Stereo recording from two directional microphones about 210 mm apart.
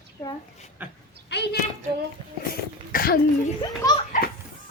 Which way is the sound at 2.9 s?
45° left (ahead or behind).